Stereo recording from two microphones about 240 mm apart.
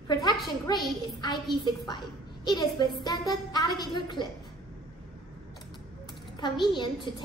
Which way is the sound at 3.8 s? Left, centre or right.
Centre.